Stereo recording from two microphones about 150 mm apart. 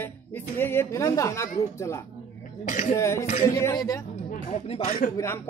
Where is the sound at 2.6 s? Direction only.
60° left (ahead or behind).